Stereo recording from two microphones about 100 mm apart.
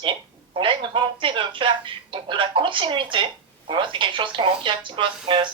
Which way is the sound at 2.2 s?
55° right (ahead or behind).